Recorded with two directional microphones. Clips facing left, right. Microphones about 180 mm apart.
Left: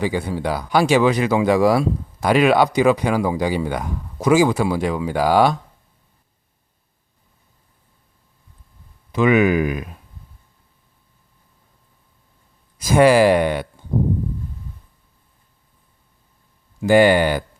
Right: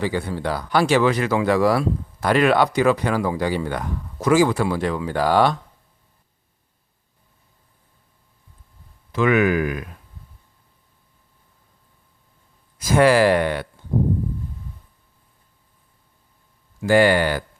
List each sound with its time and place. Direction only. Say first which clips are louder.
0.0 s speech: left 2 dB; 15° left (ahead or behind)
9.1 s speech: left 2 dB; 20° left (ahead or behind)
12.8 s speech: left 2 dB; 15° left (ahead or behind)
16.8 s speech: left 3 dB; 15° left (ahead or behind)